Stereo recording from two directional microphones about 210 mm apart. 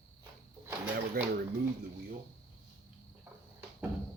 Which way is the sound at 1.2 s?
45° right (ahead or behind).